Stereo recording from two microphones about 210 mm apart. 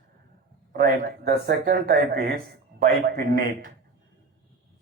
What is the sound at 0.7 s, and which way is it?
Speech, 45° right (ahead or behind).